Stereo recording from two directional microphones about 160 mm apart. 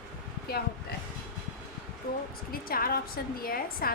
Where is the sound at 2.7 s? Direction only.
65° left (ahead or behind).